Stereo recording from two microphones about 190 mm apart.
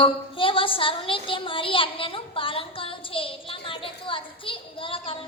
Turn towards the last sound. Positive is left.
turn(degrees=30)  # may be behind; listen again after turning